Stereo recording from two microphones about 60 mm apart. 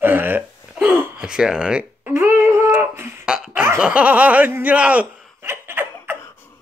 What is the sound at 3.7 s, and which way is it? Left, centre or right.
Speech, centre.